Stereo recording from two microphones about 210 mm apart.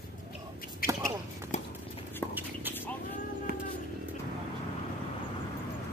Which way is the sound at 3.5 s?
45° right (ahead or behind).